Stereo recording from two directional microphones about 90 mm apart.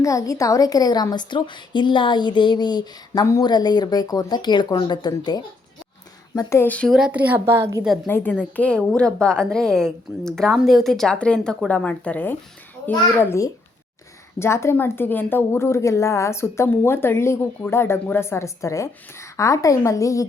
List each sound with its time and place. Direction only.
0.0 s a woman's voice: 40° left (ahead or behind)
6.8 s speech: 5° right (ahead or behind)
7.1 s a woman's voice: 20° right (ahead or behind)
8.0 s speech: 20° left (ahead or behind)
14.3 s a woman's voice: 30° left (ahead or behind)